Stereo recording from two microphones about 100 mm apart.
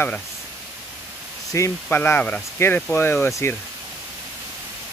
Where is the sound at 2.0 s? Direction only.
20° left (ahead or behind).